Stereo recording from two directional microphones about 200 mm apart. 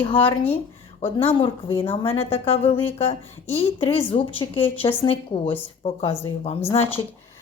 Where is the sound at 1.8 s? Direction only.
30° left (ahead or behind).